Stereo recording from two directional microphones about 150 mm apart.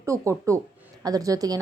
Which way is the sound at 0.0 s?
20° right (ahead or behind).